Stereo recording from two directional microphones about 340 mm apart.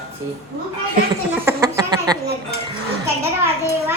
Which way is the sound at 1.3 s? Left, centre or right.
Centre.